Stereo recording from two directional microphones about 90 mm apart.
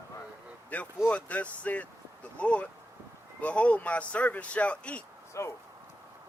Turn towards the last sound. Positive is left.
turn(degrees=35)  # may be behind; listen again after turning